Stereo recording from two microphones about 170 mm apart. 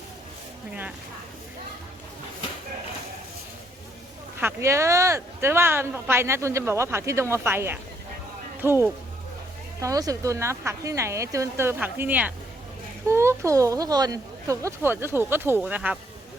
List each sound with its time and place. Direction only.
0.7 s speech: 5° right (ahead or behind)
4.4 s speech: 15° right (ahead or behind)